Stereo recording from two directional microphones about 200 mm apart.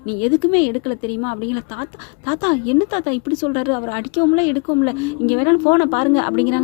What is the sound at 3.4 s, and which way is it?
A woman's voice, 35° left (ahead or behind).